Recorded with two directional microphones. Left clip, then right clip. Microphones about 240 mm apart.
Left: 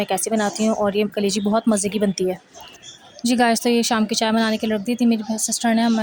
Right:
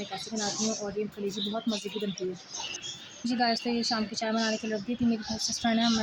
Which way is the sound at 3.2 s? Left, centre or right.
Left.